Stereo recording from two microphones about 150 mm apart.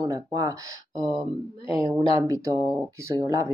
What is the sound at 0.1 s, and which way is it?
Speech, 25° right (ahead or behind).